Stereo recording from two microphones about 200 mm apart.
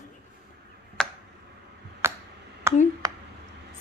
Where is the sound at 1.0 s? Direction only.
5° left (ahead or behind).